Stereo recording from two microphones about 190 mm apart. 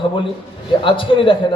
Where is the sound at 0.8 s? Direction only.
25° left (ahead or behind).